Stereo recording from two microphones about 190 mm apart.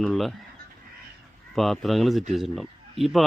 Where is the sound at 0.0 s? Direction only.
Centre (ahead or behind).